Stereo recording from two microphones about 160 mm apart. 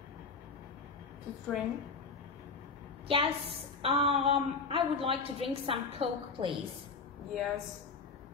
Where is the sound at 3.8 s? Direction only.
35° right (ahead or behind).